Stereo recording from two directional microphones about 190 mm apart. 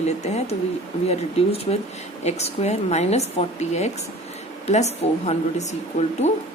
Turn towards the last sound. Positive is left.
turn(degrees=35)  # may be behind; listen again after turning